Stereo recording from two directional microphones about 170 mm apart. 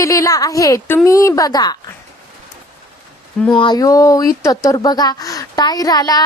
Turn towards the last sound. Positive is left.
turn(degrees=20)  # may be behind; listen again after turning